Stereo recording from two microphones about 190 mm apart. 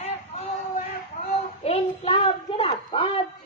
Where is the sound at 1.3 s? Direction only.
35° left (ahead or behind).